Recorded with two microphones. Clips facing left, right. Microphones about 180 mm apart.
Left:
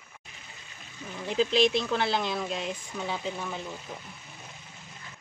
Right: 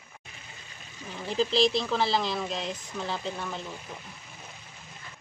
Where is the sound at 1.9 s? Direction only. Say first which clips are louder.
Right 1 dB; centre (ahead or behind).